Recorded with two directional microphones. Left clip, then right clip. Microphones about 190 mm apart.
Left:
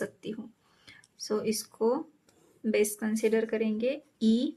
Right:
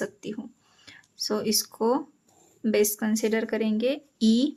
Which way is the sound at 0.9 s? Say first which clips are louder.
Right 4 dB; 30° right (ahead or behind).